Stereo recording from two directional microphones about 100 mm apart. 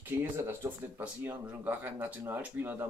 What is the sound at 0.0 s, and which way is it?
Speech, 20° right (ahead or behind).